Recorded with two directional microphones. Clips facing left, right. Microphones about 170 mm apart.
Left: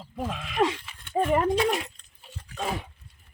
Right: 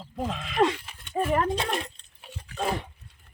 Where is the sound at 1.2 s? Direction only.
25° left (ahead or behind).